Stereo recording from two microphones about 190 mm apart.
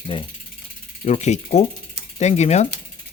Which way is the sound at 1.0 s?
35° left (ahead or behind).